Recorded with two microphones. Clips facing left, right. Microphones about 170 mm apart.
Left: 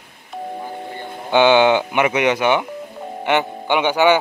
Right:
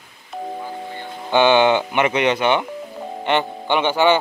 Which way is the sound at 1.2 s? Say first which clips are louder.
Left 1 dB; 15° left (ahead or behind).